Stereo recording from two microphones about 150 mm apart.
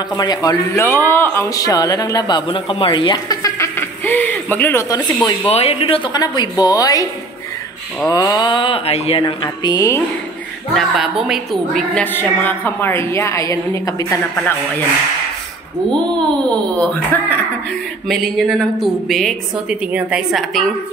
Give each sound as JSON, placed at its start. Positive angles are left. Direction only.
{"t": 0.2, "sound": "speech", "side_deg": 25}
{"t": 5.5, "sound": "speech", "side_deg": 45}
{"t": 8.1, "sound": "speech", "side_deg": 25}
{"t": 9.2, "sound": "speech", "side_deg": 30}
{"t": 10.7, "sound": "a woman's voice", "side_deg": 0}
{"t": 16.4, "sound": "a woman's voice", "side_deg": 10}